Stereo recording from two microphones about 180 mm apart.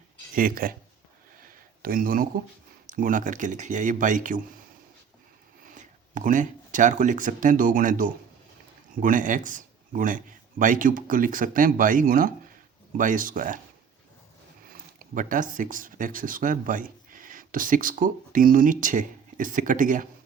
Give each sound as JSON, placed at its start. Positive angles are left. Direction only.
{"t": 0.3, "sound": "speech", "side_deg": -50}
{"t": 1.8, "sound": "speech", "side_deg": -50}
{"t": 5.7, "sound": "speech", "side_deg": -45}
{"t": 14.7, "sound": "speech", "side_deg": -50}